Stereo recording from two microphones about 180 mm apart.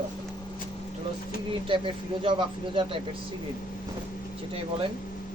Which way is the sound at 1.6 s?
30° right (ahead or behind).